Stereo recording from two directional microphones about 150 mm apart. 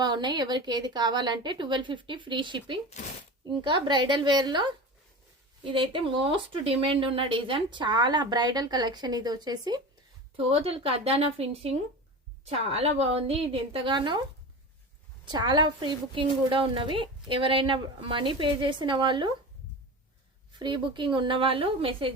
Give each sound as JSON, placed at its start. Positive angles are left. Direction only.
{"t": 0.0, "sound": "a woman's voice", "side_deg": -30}
{"t": 10.3, "sound": "a woman's voice", "side_deg": -40}
{"t": 15.3, "sound": "a woman's voice", "side_deg": -30}
{"t": 20.5, "sound": "a woman's voice", "side_deg": -30}